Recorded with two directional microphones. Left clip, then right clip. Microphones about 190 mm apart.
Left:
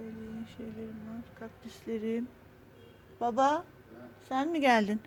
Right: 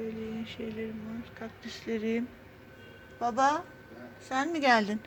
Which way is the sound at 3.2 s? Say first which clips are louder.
Right 1 dB; 40° left (ahead or behind).